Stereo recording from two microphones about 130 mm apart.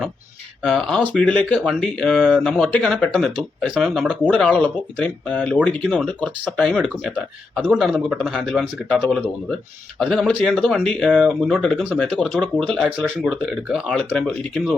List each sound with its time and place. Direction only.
0.6 s speech: 5° left (ahead or behind)